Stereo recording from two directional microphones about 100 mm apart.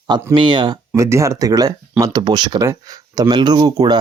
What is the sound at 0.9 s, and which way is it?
Speech, 30° right (ahead or behind).